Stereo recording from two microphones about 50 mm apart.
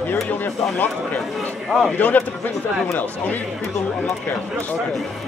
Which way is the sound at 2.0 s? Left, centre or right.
Left.